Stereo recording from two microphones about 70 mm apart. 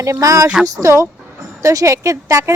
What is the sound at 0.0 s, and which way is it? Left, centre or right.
A woman's voice, right.